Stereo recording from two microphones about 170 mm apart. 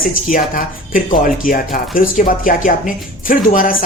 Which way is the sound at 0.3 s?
55° left (ahead or behind).